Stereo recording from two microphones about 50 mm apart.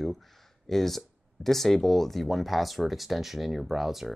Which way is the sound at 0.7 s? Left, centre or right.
Centre.